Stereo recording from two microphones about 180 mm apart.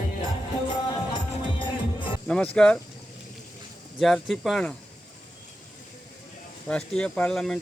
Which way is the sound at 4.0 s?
Centre (ahead or behind).